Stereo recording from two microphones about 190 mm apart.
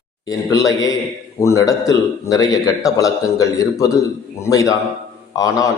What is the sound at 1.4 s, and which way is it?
A man's voice, 15° left (ahead or behind).